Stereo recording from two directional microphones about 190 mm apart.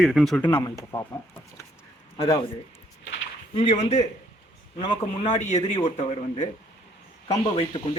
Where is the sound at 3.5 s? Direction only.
30° left (ahead or behind).